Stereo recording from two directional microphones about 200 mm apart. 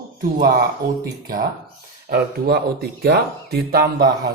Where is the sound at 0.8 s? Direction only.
50° right (ahead or behind).